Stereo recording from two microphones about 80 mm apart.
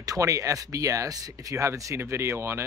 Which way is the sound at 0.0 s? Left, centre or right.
Right.